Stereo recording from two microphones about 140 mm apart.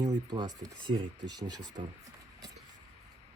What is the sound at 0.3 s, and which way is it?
Speech, 30° right (ahead or behind).